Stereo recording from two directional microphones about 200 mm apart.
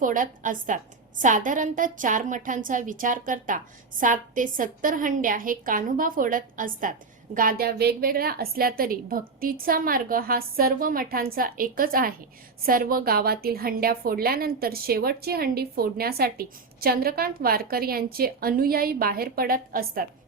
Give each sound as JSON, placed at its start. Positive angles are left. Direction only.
{"t": 0.0, "sound": "a woman's voice", "side_deg": -40}